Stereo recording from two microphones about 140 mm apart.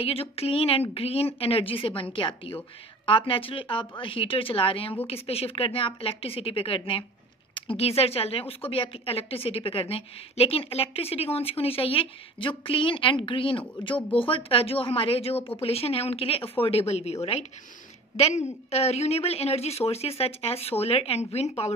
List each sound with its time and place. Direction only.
0.0 s a woman's voice: 45° left (ahead or behind)